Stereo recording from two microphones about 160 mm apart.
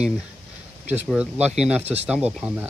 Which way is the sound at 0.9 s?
10° right (ahead or behind).